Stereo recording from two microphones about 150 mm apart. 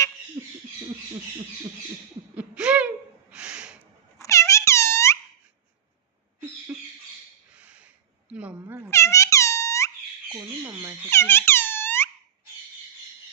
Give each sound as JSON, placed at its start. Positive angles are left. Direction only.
{"t": 0.4, "sound": "a sound", "side_deg": -20}
{"t": 2.3, "sound": "a sound", "side_deg": -10}
{"t": 4.2, "sound": "air horn", "side_deg": 20}
{"t": 6.7, "sound": "rodents", "side_deg": -10}
{"t": 7.5, "sound": "a sound", "side_deg": -10}
{"t": 8.3, "sound": "dog", "side_deg": -10}
{"t": 8.9, "sound": "air horn", "side_deg": 20}
{"t": 10.2, "sound": "squawk", "side_deg": -15}
{"t": 11.1, "sound": "music", "side_deg": 15}